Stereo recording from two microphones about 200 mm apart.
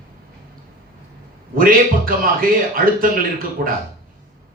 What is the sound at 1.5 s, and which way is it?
A man's voice, 45° right (ahead or behind).